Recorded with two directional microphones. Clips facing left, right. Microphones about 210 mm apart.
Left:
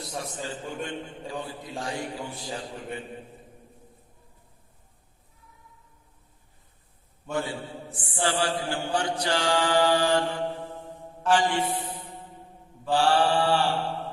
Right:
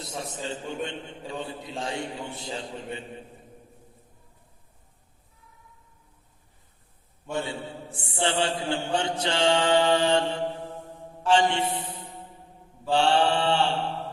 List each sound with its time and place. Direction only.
0.0 s a man's voice: 25° right (ahead or behind)
7.3 s a man's voice: 25° right (ahead or behind)
12.9 s a man's voice: 25° right (ahead or behind)